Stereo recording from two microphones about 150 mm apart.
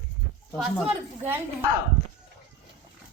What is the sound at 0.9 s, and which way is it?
Speech, 15° right (ahead or behind).